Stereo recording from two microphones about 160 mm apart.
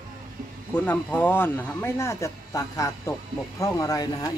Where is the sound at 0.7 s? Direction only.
10° left (ahead or behind).